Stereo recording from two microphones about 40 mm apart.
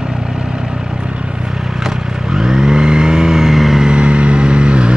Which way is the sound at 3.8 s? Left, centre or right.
Right.